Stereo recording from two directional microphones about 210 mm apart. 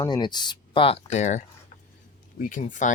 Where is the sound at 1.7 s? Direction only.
35° left (ahead or behind).